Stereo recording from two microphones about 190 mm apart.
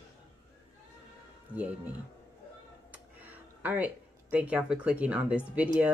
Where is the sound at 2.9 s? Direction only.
10° right (ahead or behind).